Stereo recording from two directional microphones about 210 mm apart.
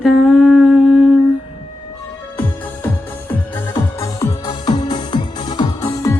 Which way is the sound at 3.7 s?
15° left (ahead or behind).